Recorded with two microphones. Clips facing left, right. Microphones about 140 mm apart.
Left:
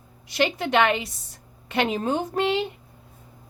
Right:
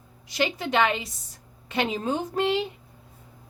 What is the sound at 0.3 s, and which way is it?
A woman's voice, 65° left (ahead or behind).